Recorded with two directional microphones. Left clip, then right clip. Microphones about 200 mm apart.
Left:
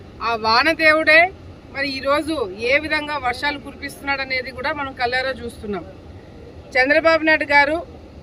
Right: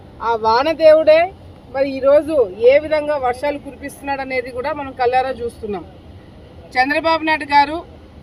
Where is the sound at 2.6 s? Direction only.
5° left (ahead or behind).